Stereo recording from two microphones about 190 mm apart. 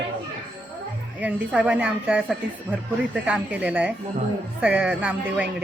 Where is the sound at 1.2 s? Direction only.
5° right (ahead or behind).